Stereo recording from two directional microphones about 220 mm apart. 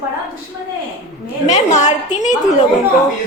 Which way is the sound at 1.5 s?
30° left (ahead or behind).